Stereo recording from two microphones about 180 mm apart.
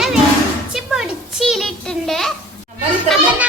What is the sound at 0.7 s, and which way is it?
A child's voice, 5° right (ahead or behind).